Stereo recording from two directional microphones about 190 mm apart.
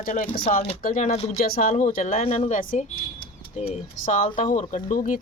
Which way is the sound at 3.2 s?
30° left (ahead or behind).